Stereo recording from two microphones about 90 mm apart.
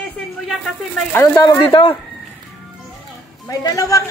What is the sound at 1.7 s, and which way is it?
Speech, 60° left (ahead or behind).